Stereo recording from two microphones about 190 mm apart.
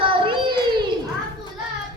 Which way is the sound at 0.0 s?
25° right (ahead or behind).